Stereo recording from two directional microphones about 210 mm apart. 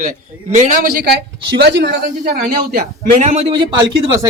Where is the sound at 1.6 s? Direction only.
55° right (ahead or behind).